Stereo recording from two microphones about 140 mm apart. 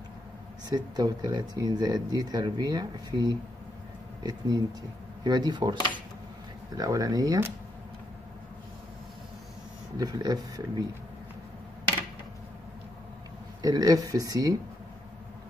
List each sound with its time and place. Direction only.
0.7 s speech: 30° right (ahead or behind)
6.8 s speech: 25° right (ahead or behind)
9.9 s speech: 30° right (ahead or behind)
13.6 s speech: 25° right (ahead or behind)